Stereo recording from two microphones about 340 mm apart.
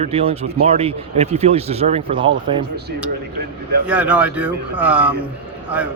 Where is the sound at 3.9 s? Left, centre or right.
Centre.